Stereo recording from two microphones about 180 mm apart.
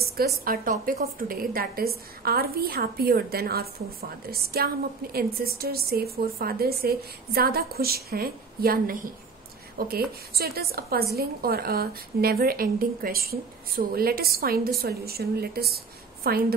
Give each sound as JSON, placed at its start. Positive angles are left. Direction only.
{"t": 0.0, "sound": "a woman's voice", "side_deg": -60}